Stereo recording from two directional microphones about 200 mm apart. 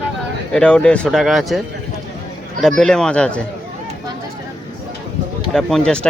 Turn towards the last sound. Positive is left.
turn(degrees=5)  # may be behind; listen again after turning